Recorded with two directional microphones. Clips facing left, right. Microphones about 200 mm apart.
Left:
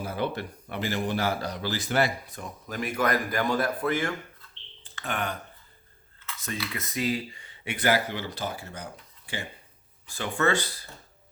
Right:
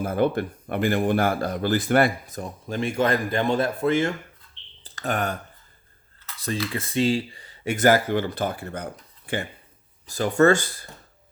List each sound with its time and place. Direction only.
0.0 s speech: 50° right (ahead or behind)
2.6 s speech: 25° right (ahead or behind)
4.8 s a sound: 40° right (ahead or behind)
6.2 s speech: 35° right (ahead or behind); by 9.5 s 55° right (ahead or behind)
10.1 s speech: 40° right (ahead or behind)